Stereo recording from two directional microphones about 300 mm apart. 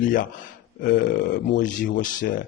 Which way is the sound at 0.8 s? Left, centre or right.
Left.